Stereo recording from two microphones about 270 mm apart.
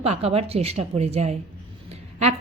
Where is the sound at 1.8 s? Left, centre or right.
Right.